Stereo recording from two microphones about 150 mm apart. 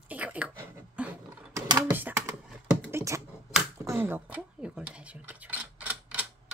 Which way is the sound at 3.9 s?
15° right (ahead or behind).